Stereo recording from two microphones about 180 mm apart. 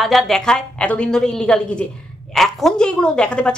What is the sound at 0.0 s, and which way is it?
A woman's voice, centre (ahead or behind).